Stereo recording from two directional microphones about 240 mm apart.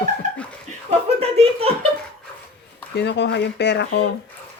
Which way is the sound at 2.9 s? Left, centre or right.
Left.